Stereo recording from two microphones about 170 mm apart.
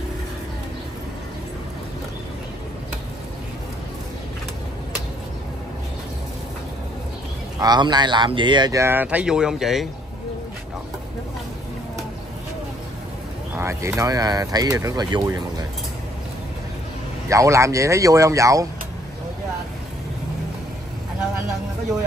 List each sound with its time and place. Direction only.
7.5 s speech: 25° right (ahead or behind); by 9.8 s centre (ahead or behind)
13.6 s speech: 15° right (ahead or behind)
17.3 s speech: 20° right (ahead or behind)